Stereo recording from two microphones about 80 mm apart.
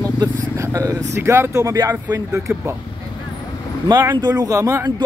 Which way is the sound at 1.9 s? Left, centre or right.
Right.